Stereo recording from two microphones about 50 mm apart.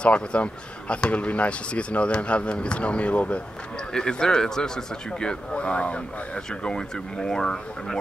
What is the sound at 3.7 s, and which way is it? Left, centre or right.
Speech, centre.